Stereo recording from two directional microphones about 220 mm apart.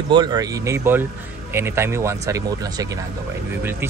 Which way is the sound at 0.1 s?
20° right (ahead or behind).